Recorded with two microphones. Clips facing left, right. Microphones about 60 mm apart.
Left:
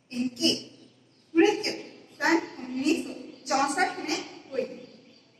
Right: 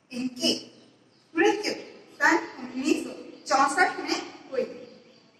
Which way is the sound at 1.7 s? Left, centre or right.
Right.